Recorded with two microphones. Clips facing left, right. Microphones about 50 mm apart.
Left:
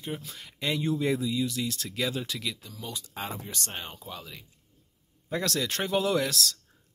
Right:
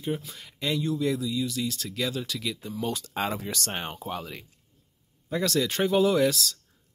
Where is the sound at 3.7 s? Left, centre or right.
Right.